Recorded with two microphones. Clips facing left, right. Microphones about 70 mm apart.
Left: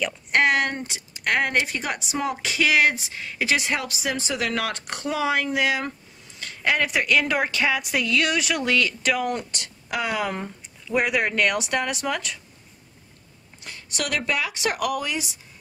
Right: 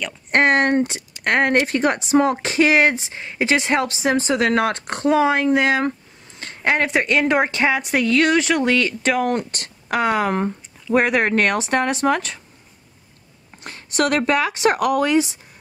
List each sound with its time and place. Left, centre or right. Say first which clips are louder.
0.3 s a woman's voice: right 5 dB; right
13.7 s a woman's voice: right 9 dB; right